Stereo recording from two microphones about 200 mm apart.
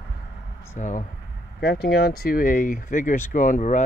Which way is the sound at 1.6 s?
50° left (ahead or behind).